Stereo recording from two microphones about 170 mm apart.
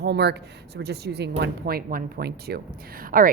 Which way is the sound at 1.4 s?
60° right (ahead or behind).